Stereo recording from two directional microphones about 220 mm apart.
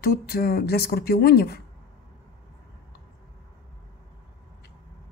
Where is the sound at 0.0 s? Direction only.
45° left (ahead or behind).